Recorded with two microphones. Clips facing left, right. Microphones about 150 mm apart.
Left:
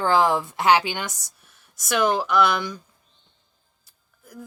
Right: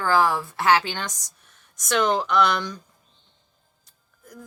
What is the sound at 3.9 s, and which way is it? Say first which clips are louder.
Music: right 1 dB; 5° left (ahead or behind).